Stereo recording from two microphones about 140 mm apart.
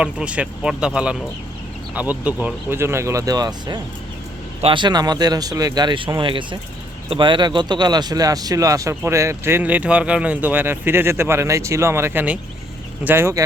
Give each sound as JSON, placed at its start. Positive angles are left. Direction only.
{"t": 0.0, "sound": "speech", "side_deg": -10}